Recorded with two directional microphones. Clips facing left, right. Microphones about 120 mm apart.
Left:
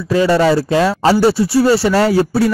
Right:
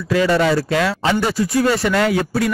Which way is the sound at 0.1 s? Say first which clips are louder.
Left 3 dB; 30° left (ahead or behind).